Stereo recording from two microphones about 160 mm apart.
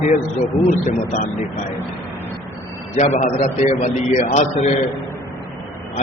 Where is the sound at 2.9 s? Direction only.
45° left (ahead or behind).